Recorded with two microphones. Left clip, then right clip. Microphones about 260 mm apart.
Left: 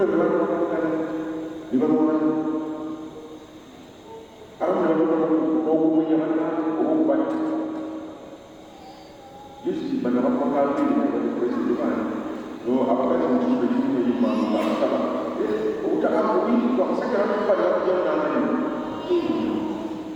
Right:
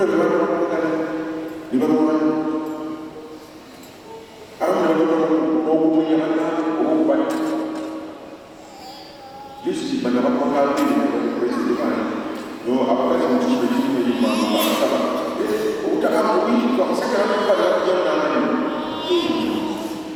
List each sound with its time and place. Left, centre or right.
0.0 s a sound: centre
1.8 s mantra: centre
4.6 s chant: centre
6.0 s music: centre
7.5 s music: centre
9.6 s a sound: centre
13.1 s music: centre